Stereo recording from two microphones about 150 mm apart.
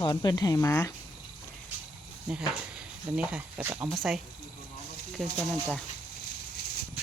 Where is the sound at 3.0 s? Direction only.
5° right (ahead or behind).